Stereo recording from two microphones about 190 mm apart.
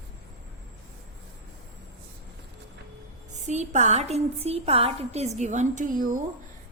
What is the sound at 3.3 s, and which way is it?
A woman's voice, 35° right (ahead or behind).